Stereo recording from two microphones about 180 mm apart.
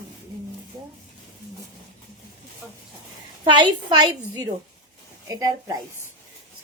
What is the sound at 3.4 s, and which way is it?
A woman's voice, 25° right (ahead or behind).